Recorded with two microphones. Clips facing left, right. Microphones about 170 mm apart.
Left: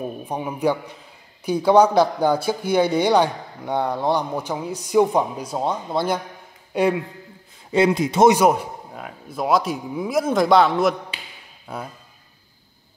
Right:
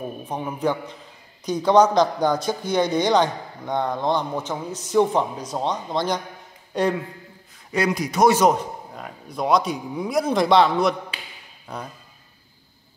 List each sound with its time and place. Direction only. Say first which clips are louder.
0.2 s a man's voice: left 2 dB; 10° left (ahead or behind)
7.7 s speech: left 5 dB; 25° left (ahead or behind)
8.4 s a man's voice: left 1 dB; 10° left (ahead or behind)